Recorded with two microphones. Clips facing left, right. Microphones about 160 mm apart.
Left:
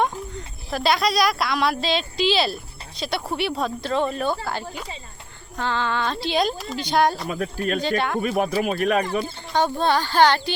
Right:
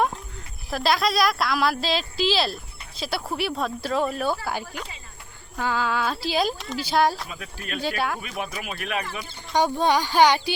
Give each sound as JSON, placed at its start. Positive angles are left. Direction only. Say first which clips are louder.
{"t": 0.0, "sound": "speech", "louder": "left 1 dB", "side_deg": 0}
{"t": 5.5, "sound": "speech", "louder": "left 1 dB", "side_deg": -5}
{"t": 7.3, "sound": "speech", "louder": "left 11 dB", "side_deg": 45}
{"t": 7.8, "sound": "speech", "louder": "left 1 dB", "side_deg": -5}
{"t": 8.2, "sound": "speech", "louder": "left 11 dB", "side_deg": 45}
{"t": 9.6, "sound": "speech", "louder": "even", "side_deg": -15}